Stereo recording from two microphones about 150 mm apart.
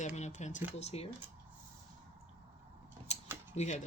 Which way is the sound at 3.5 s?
50° left (ahead or behind).